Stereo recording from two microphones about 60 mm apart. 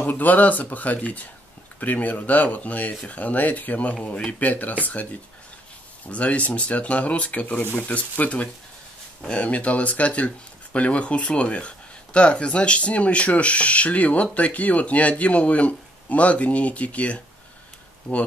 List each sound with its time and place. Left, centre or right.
0.0 s speech: left
6.0 s speech: left